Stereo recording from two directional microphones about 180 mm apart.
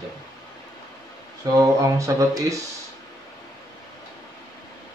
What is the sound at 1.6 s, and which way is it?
Speech, 15° right (ahead or behind).